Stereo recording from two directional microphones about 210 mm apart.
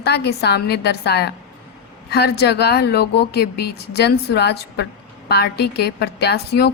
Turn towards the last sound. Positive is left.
turn(degrees=50)  # may be behind; listen again after turning